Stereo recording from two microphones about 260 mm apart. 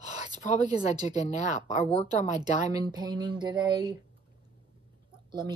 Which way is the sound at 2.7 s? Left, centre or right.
Centre.